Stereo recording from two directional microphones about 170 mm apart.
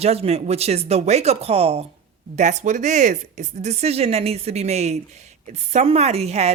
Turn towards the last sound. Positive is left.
turn(degrees=-40)  # may be behind; listen again after turning